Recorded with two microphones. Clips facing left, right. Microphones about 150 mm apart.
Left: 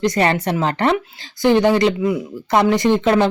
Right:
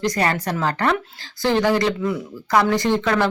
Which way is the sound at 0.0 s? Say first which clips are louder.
Left 4 dB; 25° left (ahead or behind).